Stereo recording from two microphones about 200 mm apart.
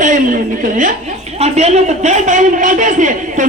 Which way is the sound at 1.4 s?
35° right (ahead or behind).